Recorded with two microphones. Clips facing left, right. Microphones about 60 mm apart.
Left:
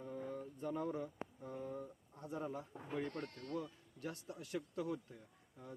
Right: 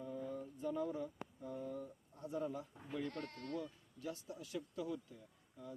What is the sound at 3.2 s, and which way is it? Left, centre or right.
Speech, right.